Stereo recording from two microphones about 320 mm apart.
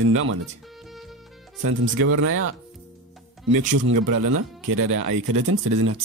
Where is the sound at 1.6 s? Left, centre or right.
Right.